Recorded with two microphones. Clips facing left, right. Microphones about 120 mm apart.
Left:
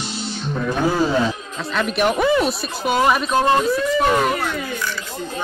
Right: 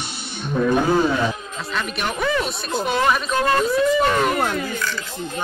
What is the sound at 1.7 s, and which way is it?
Speech, centre (ahead or behind).